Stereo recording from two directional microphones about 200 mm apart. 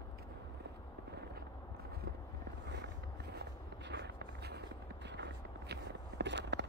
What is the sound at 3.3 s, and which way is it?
Walk, 60° right (ahead or behind).